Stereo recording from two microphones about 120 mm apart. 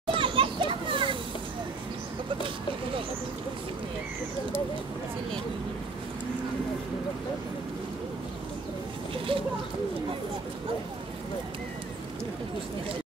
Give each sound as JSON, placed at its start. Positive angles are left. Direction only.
{"t": 0.1, "sound": "children playing", "side_deg": -45}
{"t": 9.3, "sound": "bird", "side_deg": -45}